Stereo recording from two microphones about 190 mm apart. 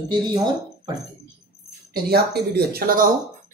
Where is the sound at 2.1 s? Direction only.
60° right (ahead or behind).